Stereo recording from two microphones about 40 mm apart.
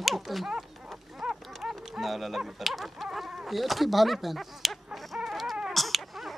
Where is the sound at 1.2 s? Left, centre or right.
Right.